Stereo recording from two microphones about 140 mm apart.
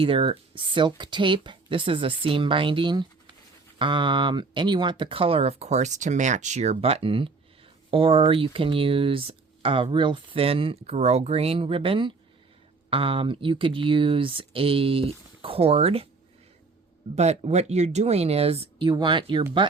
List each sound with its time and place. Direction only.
0.0 s speech: 40° right (ahead or behind)
17.2 s speech: 50° right (ahead or behind)
18.9 s speech: 30° right (ahead or behind)